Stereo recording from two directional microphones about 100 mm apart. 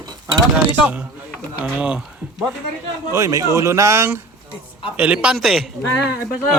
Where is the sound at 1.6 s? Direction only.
10° right (ahead or behind).